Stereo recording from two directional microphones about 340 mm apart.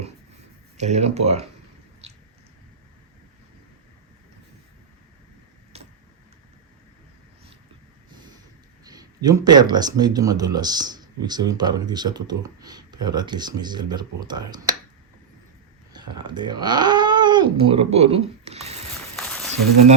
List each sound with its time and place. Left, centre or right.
0.8 s speech: centre
2.0 s chewing: centre
8.8 s speech: centre
15.9 s speech: centre
19.1 s a sound: centre